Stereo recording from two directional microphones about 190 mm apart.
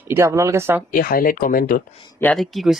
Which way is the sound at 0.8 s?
50° left (ahead or behind).